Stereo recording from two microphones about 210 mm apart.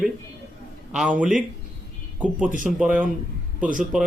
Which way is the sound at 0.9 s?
5° right (ahead or behind).